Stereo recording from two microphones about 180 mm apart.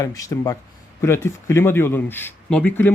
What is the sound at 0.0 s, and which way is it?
Speech, 20° left (ahead or behind).